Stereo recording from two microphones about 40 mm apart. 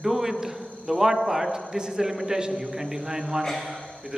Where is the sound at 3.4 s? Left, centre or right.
Centre.